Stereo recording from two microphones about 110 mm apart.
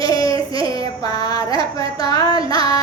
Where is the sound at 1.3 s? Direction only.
35° left (ahead or behind).